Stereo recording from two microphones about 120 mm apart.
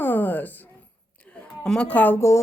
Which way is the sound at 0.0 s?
15° left (ahead or behind).